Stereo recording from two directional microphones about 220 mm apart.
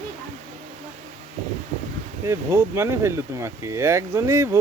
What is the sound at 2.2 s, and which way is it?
Speech, 10° right (ahead or behind).